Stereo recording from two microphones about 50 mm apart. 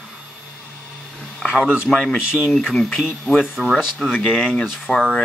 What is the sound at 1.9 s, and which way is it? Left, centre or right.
Speech, centre.